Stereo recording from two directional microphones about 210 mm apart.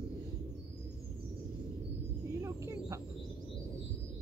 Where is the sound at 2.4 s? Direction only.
15° right (ahead or behind).